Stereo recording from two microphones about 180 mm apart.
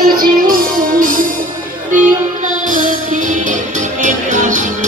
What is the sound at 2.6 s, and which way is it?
Music, 45° right (ahead or behind).